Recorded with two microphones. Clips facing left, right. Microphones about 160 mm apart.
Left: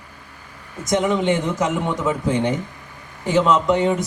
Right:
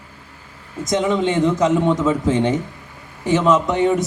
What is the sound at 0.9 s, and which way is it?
A man's voice, 20° right (ahead or behind).